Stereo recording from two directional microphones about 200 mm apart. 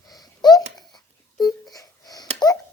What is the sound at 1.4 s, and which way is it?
Wail, 20° left (ahead or behind).